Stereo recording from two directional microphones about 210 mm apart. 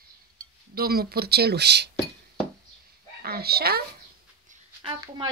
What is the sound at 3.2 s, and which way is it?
Speech, 50° right (ahead or behind).